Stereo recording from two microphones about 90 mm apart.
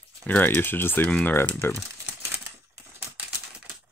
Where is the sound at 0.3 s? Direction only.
20° left (ahead or behind).